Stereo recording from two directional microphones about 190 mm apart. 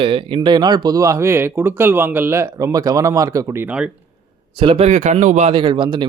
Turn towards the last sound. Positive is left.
turn(degrees=-25)  # may be behind; listen again after turning